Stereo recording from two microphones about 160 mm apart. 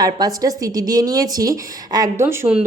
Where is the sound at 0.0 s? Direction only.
25° right (ahead or behind).